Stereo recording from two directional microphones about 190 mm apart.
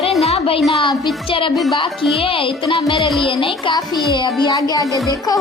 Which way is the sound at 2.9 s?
Centre (ahead or behind).